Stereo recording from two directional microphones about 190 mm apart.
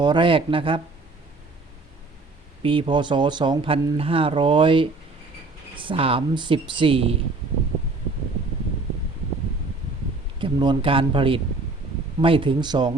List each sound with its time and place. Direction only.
0.0 s speech: 25° right (ahead or behind)
2.6 s speech: 25° right (ahead or behind)
10.3 s speech: 25° right (ahead or behind)